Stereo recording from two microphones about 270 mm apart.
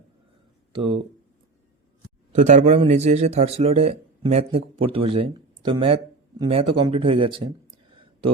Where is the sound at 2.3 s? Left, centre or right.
Right.